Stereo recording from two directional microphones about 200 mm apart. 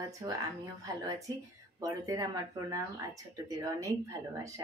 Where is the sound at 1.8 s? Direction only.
15° right (ahead or behind).